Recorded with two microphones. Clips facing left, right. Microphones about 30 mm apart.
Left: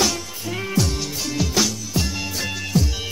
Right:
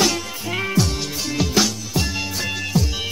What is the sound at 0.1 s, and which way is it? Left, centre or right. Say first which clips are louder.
Music: right 3 dB; right.